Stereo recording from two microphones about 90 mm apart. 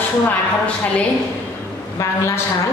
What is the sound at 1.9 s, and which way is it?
Speech, 35° left (ahead or behind).